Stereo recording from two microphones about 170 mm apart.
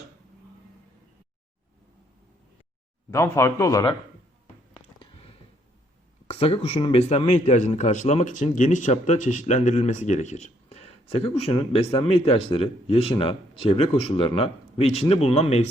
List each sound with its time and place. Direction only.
3.1 s speech: 15° left (ahead or behind)
4.7 s a sound: 35° left (ahead or behind)
6.2 s speech: 35° left (ahead or behind)